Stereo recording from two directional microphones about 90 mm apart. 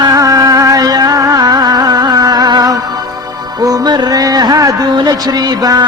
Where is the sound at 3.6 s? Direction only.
45° right (ahead or behind).